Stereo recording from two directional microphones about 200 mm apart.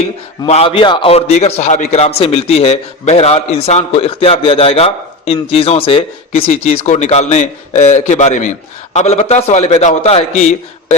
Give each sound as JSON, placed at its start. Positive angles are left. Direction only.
{"t": 0.4, "sound": "a man's voice", "side_deg": 30}